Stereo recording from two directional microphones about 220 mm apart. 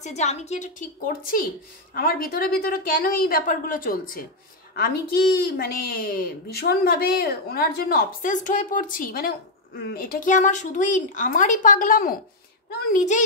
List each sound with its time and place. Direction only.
0.0 s a woman's voice: 30° left (ahead or behind)